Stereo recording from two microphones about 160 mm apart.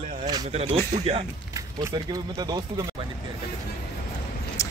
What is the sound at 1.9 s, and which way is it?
Speech, 25° right (ahead or behind).